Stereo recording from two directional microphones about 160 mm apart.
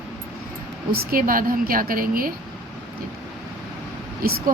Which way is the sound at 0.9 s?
60° right (ahead or behind).